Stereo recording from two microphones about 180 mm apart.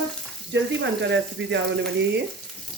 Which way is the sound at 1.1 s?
75° right (ahead or behind).